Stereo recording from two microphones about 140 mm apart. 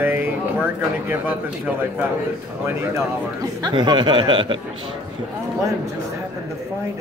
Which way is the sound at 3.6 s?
30° right (ahead or behind).